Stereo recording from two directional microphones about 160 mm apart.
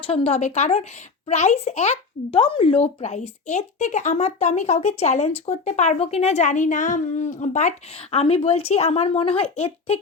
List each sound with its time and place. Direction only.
0.0 s a child's voice: 40° left (ahead or behind)
8.1 s speech: 40° left (ahead or behind)